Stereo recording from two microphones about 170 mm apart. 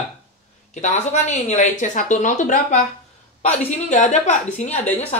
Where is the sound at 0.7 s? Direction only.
45° left (ahead or behind).